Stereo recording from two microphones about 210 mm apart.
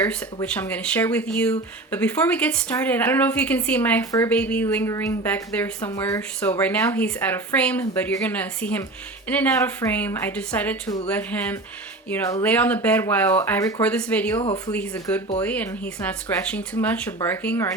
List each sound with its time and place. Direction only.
0.4 s speech: 5° left (ahead or behind)
14.3 s speech: 30° left (ahead or behind)
14.7 s speech: 10° left (ahead or behind)